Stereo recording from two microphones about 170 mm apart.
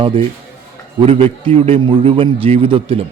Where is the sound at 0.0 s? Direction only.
30° right (ahead or behind).